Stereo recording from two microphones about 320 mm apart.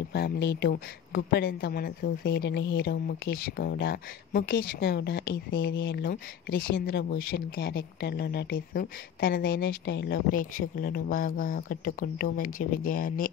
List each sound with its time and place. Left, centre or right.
0.1 s speech: left